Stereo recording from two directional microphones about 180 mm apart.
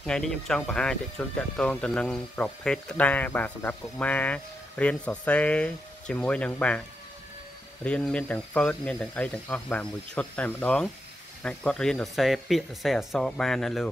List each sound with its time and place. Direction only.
0.0 s speech: 5° left (ahead or behind)
7.8 s speech: 5° left (ahead or behind)